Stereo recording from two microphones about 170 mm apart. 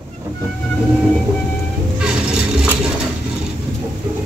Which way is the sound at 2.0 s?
5° right (ahead or behind).